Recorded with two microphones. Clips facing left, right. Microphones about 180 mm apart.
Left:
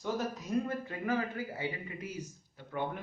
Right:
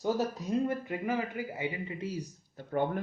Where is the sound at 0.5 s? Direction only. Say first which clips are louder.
Right 3 dB; 20° right (ahead or behind).